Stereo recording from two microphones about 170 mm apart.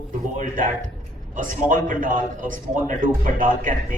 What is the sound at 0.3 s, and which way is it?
A man's voice, 50° right (ahead or behind).